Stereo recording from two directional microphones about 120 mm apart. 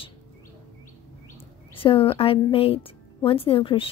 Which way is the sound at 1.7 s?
50° left (ahead or behind).